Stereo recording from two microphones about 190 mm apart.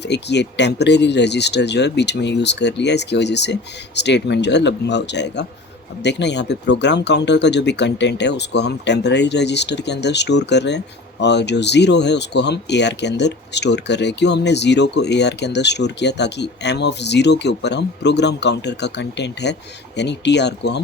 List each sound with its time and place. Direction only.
0.0 s speech: 65° left (ahead or behind)